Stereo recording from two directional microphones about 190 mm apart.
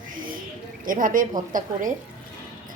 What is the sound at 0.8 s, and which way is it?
A woman's voice, 45° right (ahead or behind).